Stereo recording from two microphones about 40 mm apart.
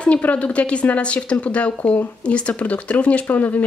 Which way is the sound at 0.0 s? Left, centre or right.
Left.